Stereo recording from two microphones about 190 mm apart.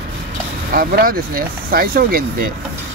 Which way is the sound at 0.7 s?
50° right (ahead or behind).